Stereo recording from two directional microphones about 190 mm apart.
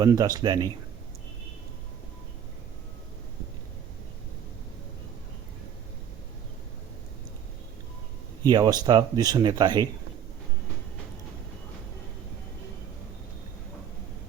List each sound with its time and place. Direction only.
0.0 s speech: 20° right (ahead or behind)
8.4 s speech: 20° right (ahead or behind)